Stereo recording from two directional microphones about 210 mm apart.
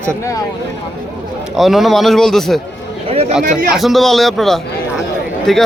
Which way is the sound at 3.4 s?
40° right (ahead or behind).